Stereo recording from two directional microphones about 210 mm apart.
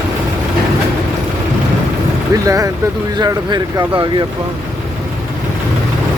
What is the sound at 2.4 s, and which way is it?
Speech, 15° right (ahead or behind).